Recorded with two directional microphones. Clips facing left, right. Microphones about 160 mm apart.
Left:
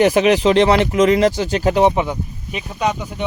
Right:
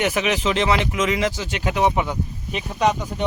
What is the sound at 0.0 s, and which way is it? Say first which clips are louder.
Speech: left 8 dB; 35° left (ahead or behind).